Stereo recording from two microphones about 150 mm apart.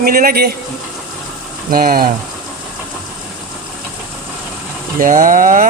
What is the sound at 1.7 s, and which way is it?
Speech, 75° right (ahead or behind).